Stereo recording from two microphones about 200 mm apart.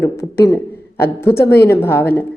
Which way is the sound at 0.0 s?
15° left (ahead or behind).